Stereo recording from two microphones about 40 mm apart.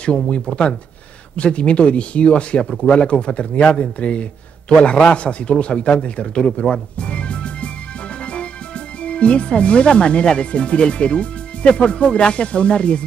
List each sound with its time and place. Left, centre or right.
0.0 s a man's voice: left
5.1 s speech: left